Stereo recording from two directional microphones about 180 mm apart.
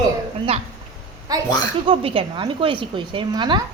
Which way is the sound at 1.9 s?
30° right (ahead or behind).